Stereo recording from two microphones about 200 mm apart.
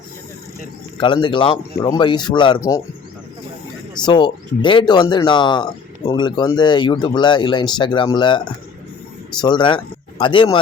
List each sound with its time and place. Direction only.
0.9 s speech: 25° left (ahead or behind)
4.0 s speech: 20° left (ahead or behind)
9.4 s speech: 20° left (ahead or behind)